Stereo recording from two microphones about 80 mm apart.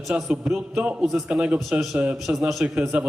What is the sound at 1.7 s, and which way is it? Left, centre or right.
Speech, centre.